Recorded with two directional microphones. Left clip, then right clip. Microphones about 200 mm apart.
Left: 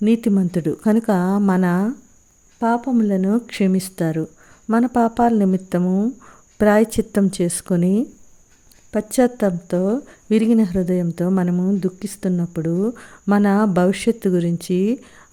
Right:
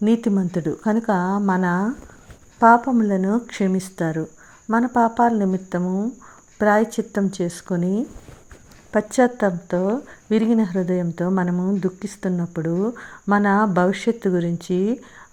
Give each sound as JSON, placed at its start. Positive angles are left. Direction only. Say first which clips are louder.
{"t": 0.0, "sound": "speech", "louder": "left 2 dB", "side_deg": 30}
{"t": 2.6, "sound": "speech", "louder": "right 7 dB", "side_deg": 15}
{"t": 2.9, "sound": "speech", "louder": "left 1 dB", "side_deg": 30}